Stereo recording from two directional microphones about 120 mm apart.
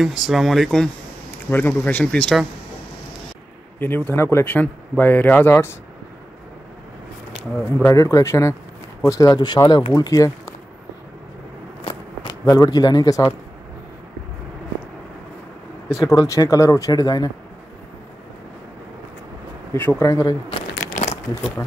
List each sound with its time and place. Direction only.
0.0 s speech: centre (ahead or behind)
1.5 s speech: 15° left (ahead or behind)
3.8 s speech: 15° left (ahead or behind)
7.8 s speech: 25° left (ahead or behind)
11.8 s a sound: 50° left (ahead or behind)
12.4 s speech: 30° left (ahead or behind)
15.9 s speech: 25° left (ahead or behind)
19.7 s speech: 20° left (ahead or behind)
20.9 s a sound: 65° left (ahead or behind)